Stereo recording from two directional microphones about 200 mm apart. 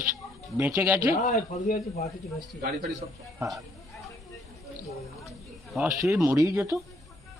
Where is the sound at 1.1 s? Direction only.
35° left (ahead or behind).